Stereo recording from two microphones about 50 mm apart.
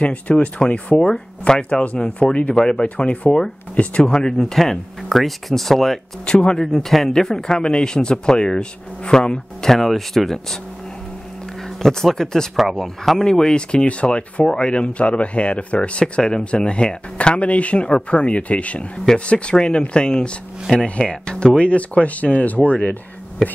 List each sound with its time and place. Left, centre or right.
0.0 s speech: left
2.5 s speech: centre
4.1 s speech: centre
6.2 s speech: centre
6.6 s speech: centre
11.8 s speech: centre
13.3 s speech: centre